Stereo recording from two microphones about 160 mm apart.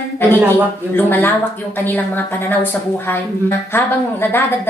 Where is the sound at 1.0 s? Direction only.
10° left (ahead or behind).